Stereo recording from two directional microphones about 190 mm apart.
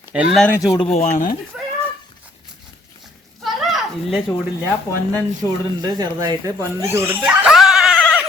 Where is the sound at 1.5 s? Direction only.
5° right (ahead or behind).